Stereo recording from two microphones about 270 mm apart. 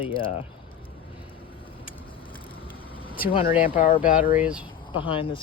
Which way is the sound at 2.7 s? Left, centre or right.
Centre.